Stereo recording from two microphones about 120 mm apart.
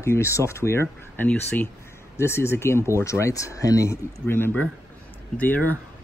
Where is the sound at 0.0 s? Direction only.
25° left (ahead or behind).